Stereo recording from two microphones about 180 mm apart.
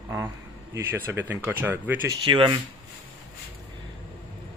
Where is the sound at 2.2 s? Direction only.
25° right (ahead or behind).